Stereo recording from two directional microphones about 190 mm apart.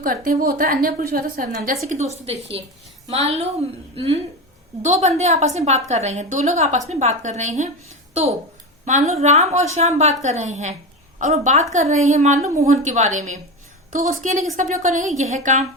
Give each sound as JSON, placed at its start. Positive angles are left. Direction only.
{"t": 0.0, "sound": "a woman's voice", "side_deg": -50}